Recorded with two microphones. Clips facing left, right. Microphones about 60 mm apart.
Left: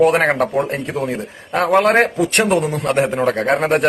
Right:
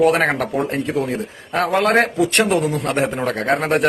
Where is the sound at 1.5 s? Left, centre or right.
Left.